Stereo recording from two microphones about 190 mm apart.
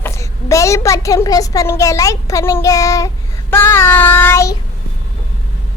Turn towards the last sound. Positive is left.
turn(degrees=15)  # may be behind; listen again after turning